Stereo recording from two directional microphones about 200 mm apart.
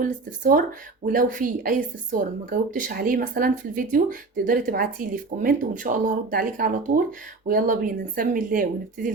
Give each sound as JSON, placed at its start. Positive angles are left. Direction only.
{"t": 0.0, "sound": "speech", "side_deg": -40}